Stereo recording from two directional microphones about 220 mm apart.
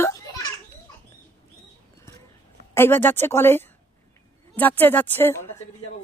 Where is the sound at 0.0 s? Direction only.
15° left (ahead or behind).